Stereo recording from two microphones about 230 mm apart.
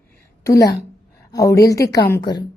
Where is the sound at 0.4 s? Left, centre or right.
Centre.